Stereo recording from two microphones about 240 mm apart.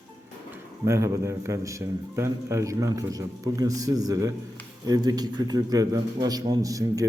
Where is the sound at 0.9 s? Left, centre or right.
Centre.